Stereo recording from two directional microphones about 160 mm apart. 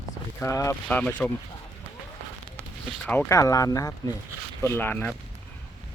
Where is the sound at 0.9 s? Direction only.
10° left (ahead or behind).